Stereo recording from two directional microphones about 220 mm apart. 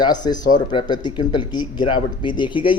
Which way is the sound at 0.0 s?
20° left (ahead or behind).